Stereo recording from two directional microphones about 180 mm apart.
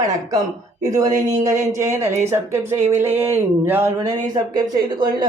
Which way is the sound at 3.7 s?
10° right (ahead or behind).